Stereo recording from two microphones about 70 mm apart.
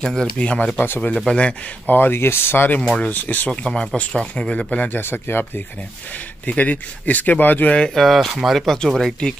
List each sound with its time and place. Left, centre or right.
0.0 s speech: centre
0.7 s speech: left
1.1 s speech: centre
1.4 s speech: left
3.6 s speech: centre
4.8 s speech: left
7.9 s speech: centre